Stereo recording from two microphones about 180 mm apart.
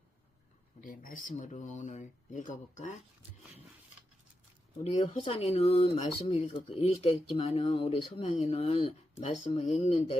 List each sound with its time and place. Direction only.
0.9 s speech: 50° left (ahead or behind)
4.8 s speech: 35° left (ahead or behind)